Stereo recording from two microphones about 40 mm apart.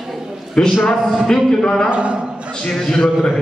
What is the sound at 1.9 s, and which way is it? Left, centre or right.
Speech, right.